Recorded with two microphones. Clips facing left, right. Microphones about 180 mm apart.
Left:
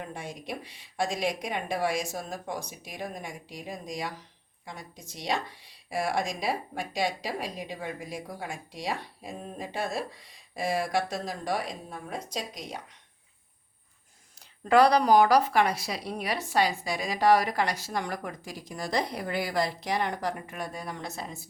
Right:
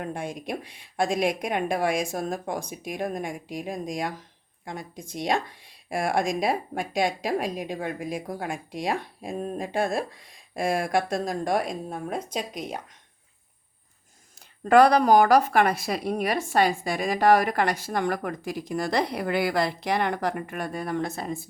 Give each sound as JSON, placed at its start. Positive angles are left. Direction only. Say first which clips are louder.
{"t": 0.0, "sound": "speech", "louder": "right 6 dB", "side_deg": -55}
{"t": 14.6, "sound": "speech", "louder": "right 3 dB", "side_deg": -50}